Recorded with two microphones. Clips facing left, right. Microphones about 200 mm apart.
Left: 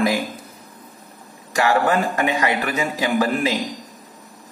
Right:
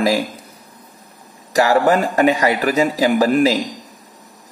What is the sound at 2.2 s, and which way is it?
Speech, 35° right (ahead or behind).